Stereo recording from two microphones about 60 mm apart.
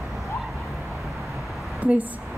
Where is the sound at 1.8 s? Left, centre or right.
Right.